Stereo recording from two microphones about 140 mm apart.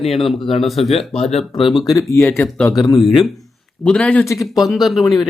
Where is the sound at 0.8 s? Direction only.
45° left (ahead or behind).